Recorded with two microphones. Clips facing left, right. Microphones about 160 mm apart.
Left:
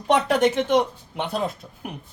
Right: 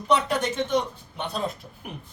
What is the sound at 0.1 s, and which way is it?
Speech, 80° left.